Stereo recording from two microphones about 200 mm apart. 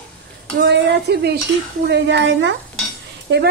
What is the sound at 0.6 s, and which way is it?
Speech, 60° right (ahead or behind).